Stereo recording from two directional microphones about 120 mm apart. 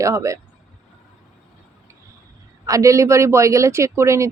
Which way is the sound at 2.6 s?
25° right (ahead or behind).